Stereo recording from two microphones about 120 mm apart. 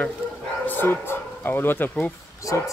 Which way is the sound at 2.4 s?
30° left (ahead or behind).